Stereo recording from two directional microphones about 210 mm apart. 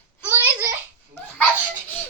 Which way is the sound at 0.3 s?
10° right (ahead or behind).